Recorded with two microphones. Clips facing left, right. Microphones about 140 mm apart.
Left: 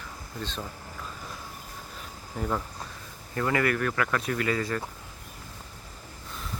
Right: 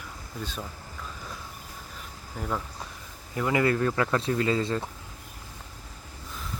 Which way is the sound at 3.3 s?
15° right (ahead or behind).